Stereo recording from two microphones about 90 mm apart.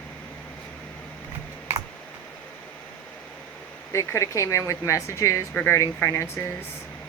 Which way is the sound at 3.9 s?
35° left (ahead or behind).